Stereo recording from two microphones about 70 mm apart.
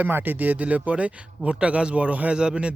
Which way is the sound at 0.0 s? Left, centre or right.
Right.